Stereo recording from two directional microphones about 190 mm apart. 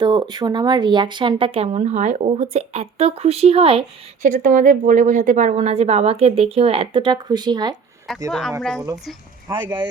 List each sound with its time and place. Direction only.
0.0 s speech: 20° right (ahead or behind)
8.3 s speech: centre (ahead or behind)
9.5 s speech: 20° right (ahead or behind)